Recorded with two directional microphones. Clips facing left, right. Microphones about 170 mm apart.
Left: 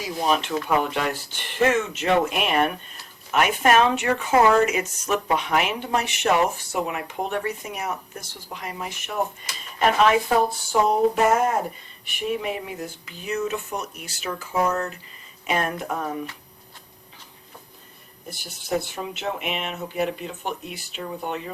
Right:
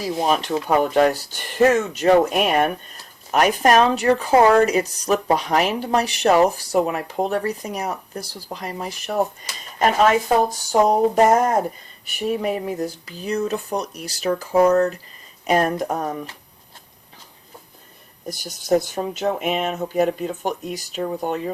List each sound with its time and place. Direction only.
0.3 s speech: 40° right (ahead or behind)
18.3 s speech: 40° right (ahead or behind)